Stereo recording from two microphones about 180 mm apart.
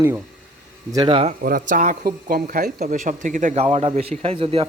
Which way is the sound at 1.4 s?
50° right (ahead or behind).